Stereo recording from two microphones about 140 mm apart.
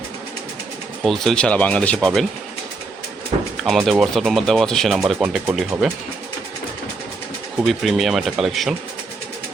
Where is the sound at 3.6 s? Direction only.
Centre (ahead or behind).